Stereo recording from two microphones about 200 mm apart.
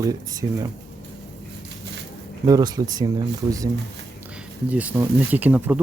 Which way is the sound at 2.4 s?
20° right (ahead or behind).